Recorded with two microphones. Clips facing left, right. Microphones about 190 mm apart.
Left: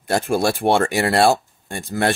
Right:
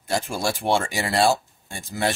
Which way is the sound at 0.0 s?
60° left (ahead or behind).